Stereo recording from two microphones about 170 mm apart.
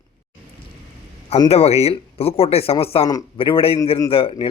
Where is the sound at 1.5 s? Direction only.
40° left (ahead or behind).